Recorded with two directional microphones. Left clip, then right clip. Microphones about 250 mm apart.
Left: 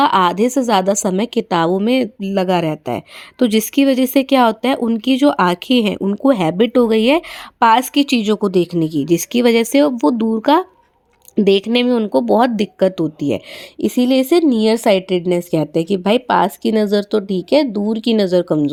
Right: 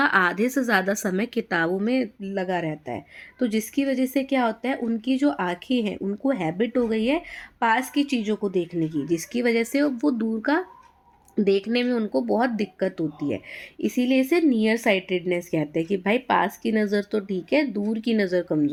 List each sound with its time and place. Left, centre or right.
0.0 s a woman's voice: left